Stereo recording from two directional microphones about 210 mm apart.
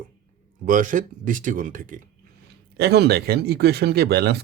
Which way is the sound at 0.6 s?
40° right (ahead or behind).